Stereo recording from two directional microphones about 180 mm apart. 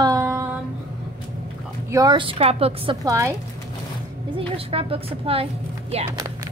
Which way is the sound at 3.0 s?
15° right (ahead or behind).